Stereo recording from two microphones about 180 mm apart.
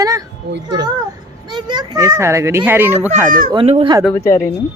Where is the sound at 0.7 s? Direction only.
25° right (ahead or behind).